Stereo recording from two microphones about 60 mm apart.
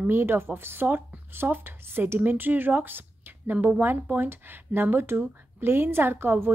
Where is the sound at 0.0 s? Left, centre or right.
Right.